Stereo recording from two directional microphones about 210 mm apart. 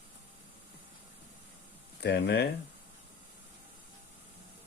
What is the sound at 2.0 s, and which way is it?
Speech, 50° left (ahead or behind).